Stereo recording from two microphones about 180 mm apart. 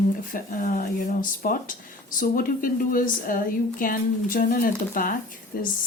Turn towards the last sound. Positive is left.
turn(degrees=55)  # may be behind; listen again after turning